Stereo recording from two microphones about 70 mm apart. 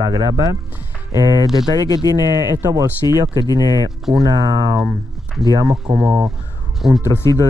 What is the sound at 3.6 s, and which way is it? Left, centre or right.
Speech, left.